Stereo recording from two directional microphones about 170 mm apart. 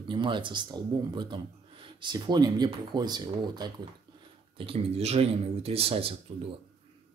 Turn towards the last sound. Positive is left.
turn(degrees=-35)  # may be behind; listen again after turning